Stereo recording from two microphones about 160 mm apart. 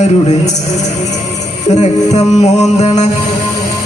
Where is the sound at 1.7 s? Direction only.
45° left (ahead or behind).